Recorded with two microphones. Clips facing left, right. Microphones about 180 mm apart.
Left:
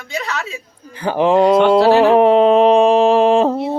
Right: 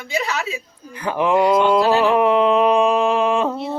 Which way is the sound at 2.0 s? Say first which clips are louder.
Left 5 dB; 35° left (ahead or behind).